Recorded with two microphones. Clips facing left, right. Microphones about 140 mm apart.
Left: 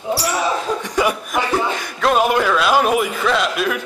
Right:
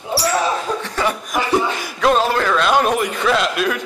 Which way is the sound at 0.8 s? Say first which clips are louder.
Left 4 dB; 15° left (ahead or behind).